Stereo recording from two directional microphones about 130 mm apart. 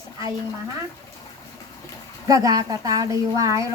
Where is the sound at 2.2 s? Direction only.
30° right (ahead or behind).